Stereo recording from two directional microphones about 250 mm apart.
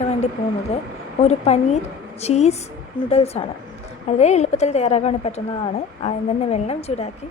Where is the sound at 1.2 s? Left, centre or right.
Left.